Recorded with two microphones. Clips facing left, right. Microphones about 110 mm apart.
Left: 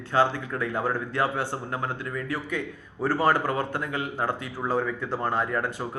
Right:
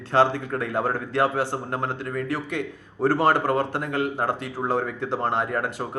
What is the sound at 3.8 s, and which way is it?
Speech, 55° right (ahead or behind).